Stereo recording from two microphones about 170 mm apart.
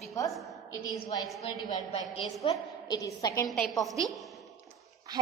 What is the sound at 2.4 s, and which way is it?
A woman's voice, 25° left (ahead or behind).